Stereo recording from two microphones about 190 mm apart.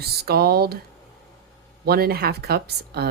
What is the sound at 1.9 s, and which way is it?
Speech, 55° right (ahead or behind).